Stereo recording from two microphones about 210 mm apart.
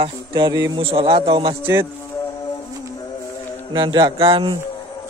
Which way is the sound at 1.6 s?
10° right (ahead or behind).